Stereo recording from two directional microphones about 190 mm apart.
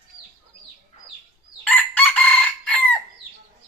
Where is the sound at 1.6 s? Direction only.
10° left (ahead or behind).